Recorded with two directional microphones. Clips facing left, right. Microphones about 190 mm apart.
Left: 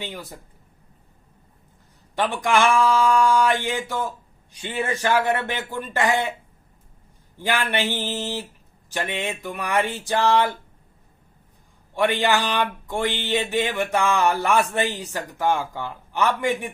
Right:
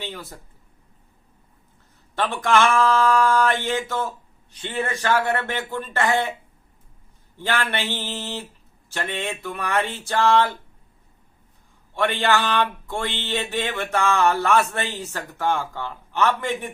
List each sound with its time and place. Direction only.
0.0 s speech: 15° left (ahead or behind)
2.1 s speech: 15° left (ahead or behind)
7.3 s speech: 15° left (ahead or behind)
11.9 s speech: 15° left (ahead or behind)